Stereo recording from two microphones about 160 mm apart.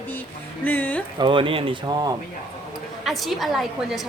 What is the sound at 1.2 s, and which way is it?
Speech, 30° right (ahead or behind).